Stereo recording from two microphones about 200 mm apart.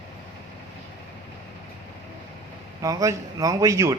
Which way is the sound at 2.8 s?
15° right (ahead or behind).